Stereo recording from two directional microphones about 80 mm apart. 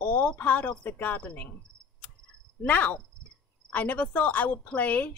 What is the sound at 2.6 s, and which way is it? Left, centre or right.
Speech, left.